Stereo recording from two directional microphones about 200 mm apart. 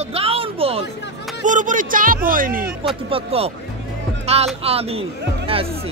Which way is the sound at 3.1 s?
30° right (ahead or behind).